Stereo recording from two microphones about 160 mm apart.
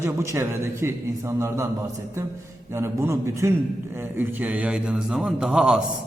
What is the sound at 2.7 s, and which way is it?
A man's voice, 15° right (ahead or behind).